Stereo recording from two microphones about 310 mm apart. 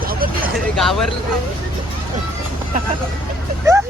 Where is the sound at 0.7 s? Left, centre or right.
Centre.